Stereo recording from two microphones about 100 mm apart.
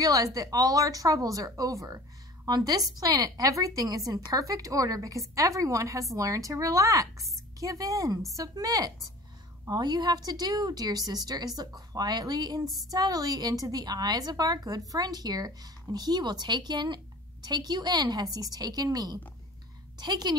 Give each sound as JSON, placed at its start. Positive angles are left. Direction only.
{"t": 0.0, "sound": "a woman's voice", "side_deg": -35}
{"t": 12.6, "sound": "speech", "side_deg": 0}
{"t": 12.9, "sound": "a woman's voice", "side_deg": -40}